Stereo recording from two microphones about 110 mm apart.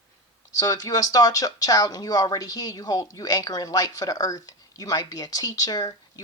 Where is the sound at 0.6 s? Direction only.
35° left (ahead or behind).